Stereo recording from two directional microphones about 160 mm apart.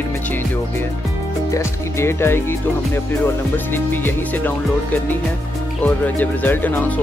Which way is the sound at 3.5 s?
10° left (ahead or behind).